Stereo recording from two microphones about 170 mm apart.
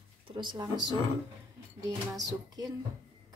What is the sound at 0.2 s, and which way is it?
Speech, 30° right (ahead or behind).